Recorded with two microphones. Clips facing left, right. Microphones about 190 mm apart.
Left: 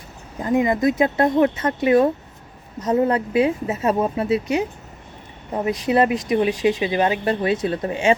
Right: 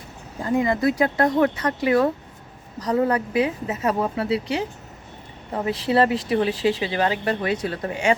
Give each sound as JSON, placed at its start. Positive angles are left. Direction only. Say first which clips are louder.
{"t": 0.4, "sound": "speech", "louder": "left 2 dB", "side_deg": 20}